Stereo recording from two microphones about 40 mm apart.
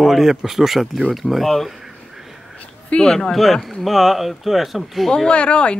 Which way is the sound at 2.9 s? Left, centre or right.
Left.